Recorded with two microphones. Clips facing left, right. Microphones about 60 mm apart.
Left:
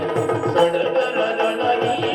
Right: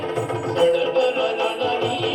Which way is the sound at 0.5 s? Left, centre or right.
Left.